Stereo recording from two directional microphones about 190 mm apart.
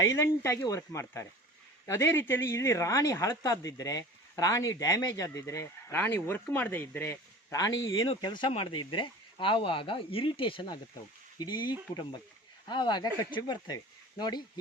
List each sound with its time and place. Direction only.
0.1 s speech: 15° left (ahead or behind)